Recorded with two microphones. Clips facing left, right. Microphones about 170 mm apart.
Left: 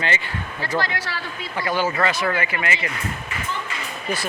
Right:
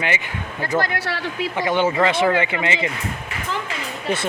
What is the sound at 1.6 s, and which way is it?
Speech, 20° right (ahead or behind).